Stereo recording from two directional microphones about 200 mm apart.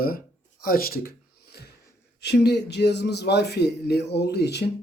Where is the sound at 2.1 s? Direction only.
55° left (ahead or behind).